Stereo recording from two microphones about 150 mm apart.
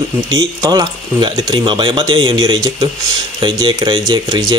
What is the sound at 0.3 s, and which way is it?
Speech, 25° right (ahead or behind).